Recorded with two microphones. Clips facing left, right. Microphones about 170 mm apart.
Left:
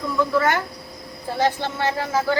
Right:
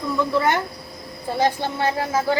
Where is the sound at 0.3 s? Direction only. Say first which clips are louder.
Even; 20° right (ahead or behind).